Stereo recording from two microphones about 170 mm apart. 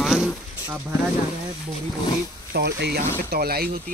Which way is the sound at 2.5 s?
75° right (ahead or behind).